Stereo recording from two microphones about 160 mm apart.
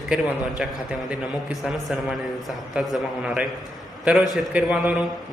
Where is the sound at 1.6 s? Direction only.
5° right (ahead or behind).